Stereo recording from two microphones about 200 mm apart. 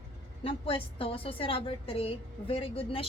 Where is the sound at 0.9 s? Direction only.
25° left (ahead or behind).